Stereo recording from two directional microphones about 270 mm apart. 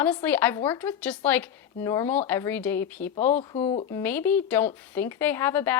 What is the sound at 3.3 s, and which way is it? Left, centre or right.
Speech, centre.